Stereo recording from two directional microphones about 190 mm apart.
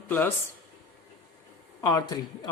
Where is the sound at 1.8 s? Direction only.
20° left (ahead or behind).